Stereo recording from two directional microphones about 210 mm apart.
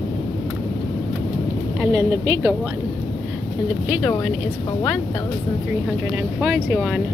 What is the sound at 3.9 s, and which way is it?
Speech, centre (ahead or behind).